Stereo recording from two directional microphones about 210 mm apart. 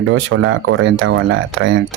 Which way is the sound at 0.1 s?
65° right (ahead or behind).